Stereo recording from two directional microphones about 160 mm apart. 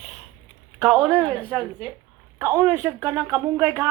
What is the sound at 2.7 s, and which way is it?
Speech, 20° right (ahead or behind).